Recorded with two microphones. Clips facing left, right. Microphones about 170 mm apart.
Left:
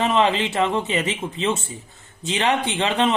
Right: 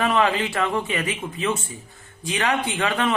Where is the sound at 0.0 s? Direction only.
20° left (ahead or behind).